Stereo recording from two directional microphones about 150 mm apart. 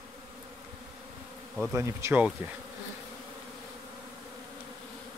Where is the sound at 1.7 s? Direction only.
20° right (ahead or behind).